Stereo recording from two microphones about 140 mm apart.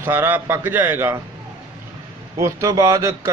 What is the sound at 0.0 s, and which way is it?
A man's voice, 15° right (ahead or behind).